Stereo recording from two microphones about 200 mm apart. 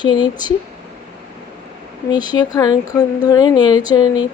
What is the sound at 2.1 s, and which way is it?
Speech, 20° left (ahead or behind).